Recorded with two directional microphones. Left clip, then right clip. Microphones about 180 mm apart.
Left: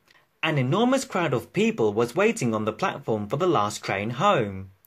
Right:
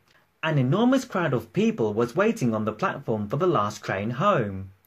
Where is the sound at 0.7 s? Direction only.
45° left (ahead or behind).